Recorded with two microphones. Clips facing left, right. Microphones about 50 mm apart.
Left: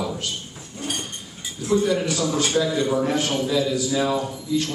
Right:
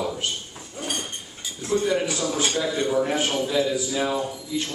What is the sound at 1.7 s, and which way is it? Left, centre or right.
Speech, right.